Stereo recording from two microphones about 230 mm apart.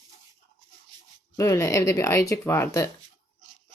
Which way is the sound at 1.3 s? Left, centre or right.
Centre.